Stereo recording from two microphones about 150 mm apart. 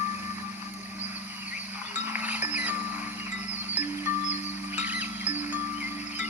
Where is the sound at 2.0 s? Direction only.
10° right (ahead or behind).